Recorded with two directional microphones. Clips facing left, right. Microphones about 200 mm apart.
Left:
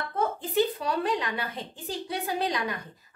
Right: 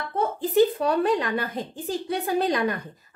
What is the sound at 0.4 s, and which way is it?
A woman's voice, 50° right (ahead or behind).